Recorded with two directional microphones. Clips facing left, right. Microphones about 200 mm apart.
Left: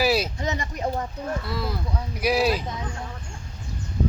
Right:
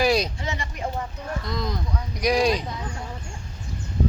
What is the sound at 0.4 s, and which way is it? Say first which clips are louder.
Speech: left 3 dB; 40° left (ahead or behind).